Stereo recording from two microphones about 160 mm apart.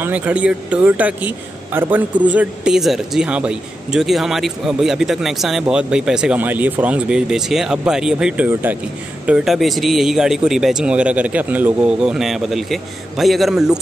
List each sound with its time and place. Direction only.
0.0 s a man's voice: 10° right (ahead or behind)